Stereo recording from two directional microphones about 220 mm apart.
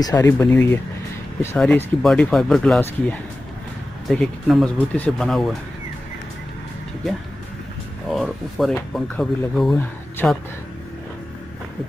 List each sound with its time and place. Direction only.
0.0 s speech: 15° left (ahead or behind)
8.1 s speech: centre (ahead or behind)